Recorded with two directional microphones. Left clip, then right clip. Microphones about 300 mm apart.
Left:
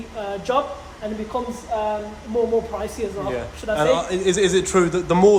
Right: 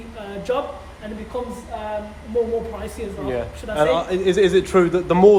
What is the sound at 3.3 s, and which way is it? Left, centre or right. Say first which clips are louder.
A man's voice: left 1 dB; centre.